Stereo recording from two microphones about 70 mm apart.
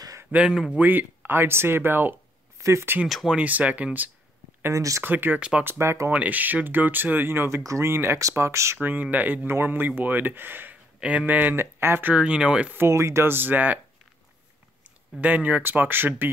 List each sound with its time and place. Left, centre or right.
0.3 s speech: centre
2.6 s speech: right
3.1 s speech: centre
3.3 s speech: right
4.7 s speech: right
5.0 s speech: right
6.1 s speech: right
8.8 s speech: right
12.1 s speech: centre
12.7 s speech: right
15.1 s speech: right